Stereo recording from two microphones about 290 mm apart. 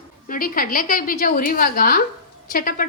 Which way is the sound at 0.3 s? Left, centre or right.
Left.